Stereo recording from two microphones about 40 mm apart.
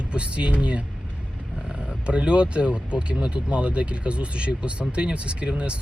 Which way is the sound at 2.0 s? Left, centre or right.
Right.